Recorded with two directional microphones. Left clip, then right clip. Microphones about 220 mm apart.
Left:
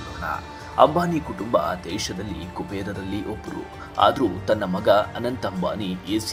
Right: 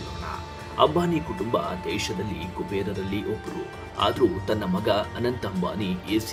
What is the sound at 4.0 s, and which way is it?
Speech, 15° left (ahead or behind).